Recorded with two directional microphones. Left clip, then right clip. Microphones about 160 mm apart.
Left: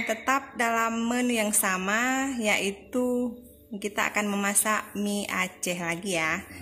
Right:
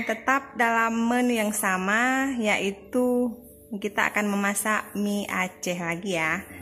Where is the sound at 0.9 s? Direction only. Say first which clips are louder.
Right 3 dB; 20° right (ahead or behind).